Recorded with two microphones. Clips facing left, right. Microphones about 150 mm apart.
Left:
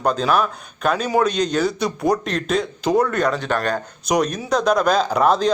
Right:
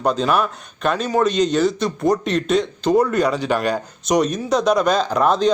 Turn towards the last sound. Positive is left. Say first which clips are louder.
# even
turn(degrees=0)  # may be behind; listen again after turning